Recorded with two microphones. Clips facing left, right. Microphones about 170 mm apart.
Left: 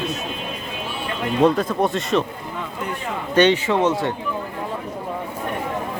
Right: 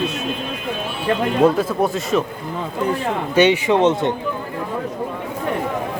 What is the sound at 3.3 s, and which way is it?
Speech, 10° right (ahead or behind).